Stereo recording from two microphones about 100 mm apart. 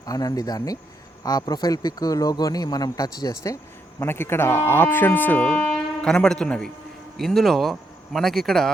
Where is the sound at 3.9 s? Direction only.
25° left (ahead or behind); by 8.6 s centre (ahead or behind).